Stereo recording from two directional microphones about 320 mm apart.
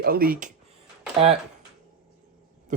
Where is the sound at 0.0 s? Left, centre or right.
Right.